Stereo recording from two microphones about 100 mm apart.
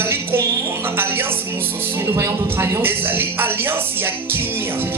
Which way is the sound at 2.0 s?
25° right (ahead or behind).